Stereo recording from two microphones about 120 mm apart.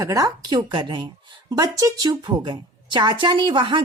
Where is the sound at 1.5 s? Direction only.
30° right (ahead or behind).